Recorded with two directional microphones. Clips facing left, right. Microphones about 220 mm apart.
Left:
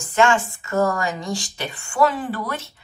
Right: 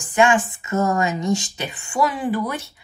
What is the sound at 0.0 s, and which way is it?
A woman's voice, 15° right (ahead or behind).